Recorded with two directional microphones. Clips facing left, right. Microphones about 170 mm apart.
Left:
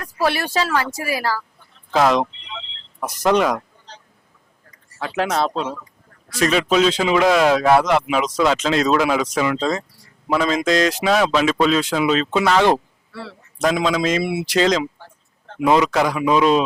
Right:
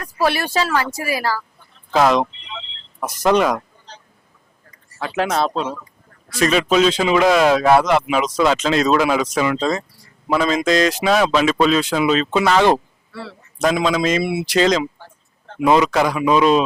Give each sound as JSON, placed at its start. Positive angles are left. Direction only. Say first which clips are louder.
{"t": 0.0, "sound": "speech", "louder": "right 1 dB", "side_deg": -10}
{"t": 2.4, "sound": "a sound", "louder": "right 1 dB", "side_deg": -10}
{"t": 3.1, "sound": "chicken", "louder": "right 1 dB", "side_deg": -10}
{"t": 4.9, "sound": "speech", "louder": "right 1 dB", "side_deg": -10}
{"t": 5.7, "sound": "honk", "louder": "right 1 dB", "side_deg": -15}
{"t": 6.3, "sound": "speech", "louder": "right 1 dB", "side_deg": -10}
{"t": 10.2, "sound": "speech", "louder": "right 1 dB", "side_deg": -10}
{"t": 14.9, "sound": "a sound", "louder": "right 1 dB", "side_deg": -20}